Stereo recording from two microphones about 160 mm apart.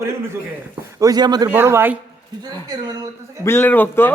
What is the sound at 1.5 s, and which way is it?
Speech, 15° right (ahead or behind).